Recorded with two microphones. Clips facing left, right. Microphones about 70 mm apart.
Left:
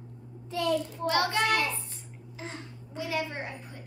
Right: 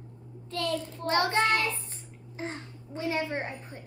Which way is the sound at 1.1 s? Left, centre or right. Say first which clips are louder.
Right 1 dB; right.